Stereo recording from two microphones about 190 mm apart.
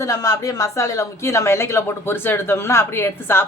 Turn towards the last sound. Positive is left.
turn(degrees=10)  # may be behind; listen again after turning